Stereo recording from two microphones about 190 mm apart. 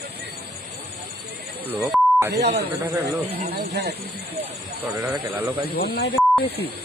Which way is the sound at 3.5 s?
60° right (ahead or behind).